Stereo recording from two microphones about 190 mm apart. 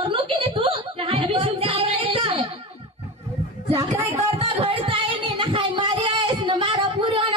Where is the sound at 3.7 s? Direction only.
15° right (ahead or behind).